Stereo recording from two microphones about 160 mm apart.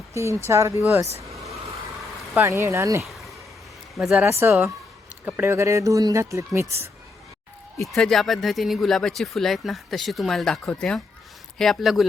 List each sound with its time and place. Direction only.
0.1 s speech: 15° right (ahead or behind)
1.3 s vehicle: centre (ahead or behind)
2.3 s speech: 15° right (ahead or behind)
3.1 s a sound: centre (ahead or behind)
3.9 s speech: centre (ahead or behind)
4.3 s speech: 15° right (ahead or behind)
7.8 s speech: centre (ahead or behind)